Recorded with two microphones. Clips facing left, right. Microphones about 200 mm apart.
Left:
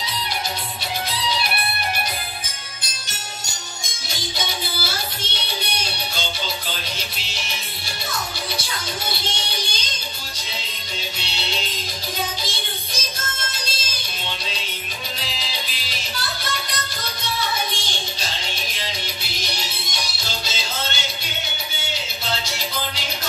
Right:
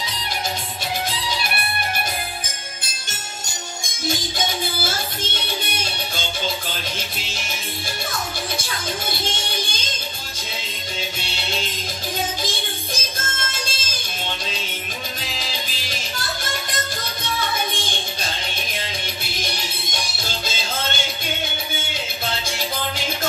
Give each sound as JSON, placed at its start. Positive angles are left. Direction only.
{"t": 19.4, "sound": "music", "side_deg": -50}